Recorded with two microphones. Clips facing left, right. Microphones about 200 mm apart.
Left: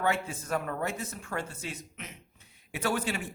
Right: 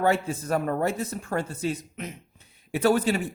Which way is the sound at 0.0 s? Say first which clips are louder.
Right 6 dB; 35° right (ahead or behind).